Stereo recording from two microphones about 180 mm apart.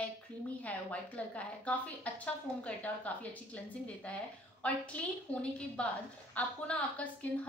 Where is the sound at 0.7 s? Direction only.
10° left (ahead or behind).